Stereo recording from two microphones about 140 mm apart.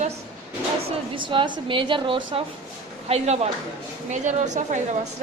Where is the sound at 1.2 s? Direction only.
35° right (ahead or behind).